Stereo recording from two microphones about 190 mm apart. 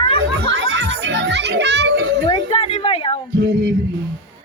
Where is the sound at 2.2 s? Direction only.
30° left (ahead or behind).